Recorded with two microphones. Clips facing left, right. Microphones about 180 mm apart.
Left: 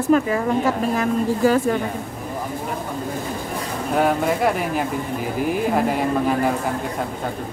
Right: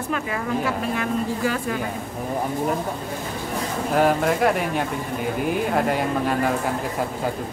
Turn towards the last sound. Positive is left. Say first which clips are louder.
# left 2 dB
turn(degrees=0)  # may be behind; listen again after turning